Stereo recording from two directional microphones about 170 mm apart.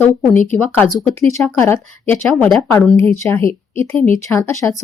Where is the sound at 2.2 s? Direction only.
Centre (ahead or behind).